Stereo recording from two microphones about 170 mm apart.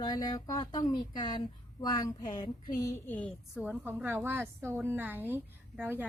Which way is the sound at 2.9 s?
10° left (ahead or behind).